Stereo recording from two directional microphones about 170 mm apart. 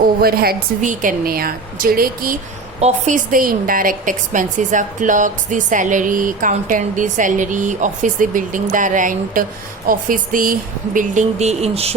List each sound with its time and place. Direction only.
0.2 s a woman's voice: 65° right (ahead or behind); by 11.9 s 35° right (ahead or behind)